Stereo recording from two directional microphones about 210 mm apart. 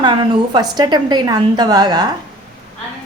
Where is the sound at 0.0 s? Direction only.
20° right (ahead or behind).